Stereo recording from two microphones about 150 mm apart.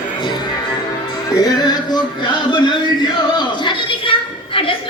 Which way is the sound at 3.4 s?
30° left (ahead or behind).